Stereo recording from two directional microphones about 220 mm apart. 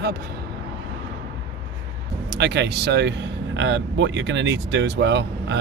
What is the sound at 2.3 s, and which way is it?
Speech, 50° right (ahead or behind).